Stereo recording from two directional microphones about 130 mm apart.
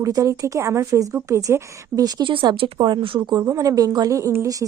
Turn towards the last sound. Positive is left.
turn(degrees=-25)  # may be behind; listen again after turning